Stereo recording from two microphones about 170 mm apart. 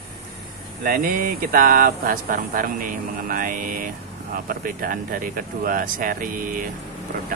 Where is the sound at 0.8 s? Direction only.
55° right (ahead or behind).